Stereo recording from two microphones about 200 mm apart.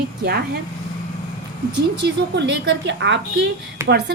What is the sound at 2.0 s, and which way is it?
A woman's voice, 60° right (ahead or behind).